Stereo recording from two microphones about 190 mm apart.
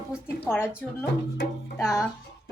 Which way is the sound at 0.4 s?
10° left (ahead or behind).